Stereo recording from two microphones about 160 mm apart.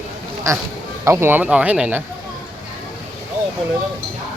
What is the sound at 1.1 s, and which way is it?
Speech, 15° right (ahead or behind).